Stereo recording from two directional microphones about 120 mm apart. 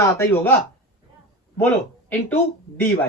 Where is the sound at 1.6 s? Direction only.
15° left (ahead or behind).